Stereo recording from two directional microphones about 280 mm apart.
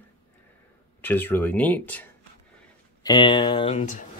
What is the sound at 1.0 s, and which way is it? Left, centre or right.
Speech, centre.